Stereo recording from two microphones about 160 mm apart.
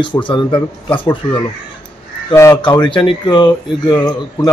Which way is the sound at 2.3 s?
25° left (ahead or behind).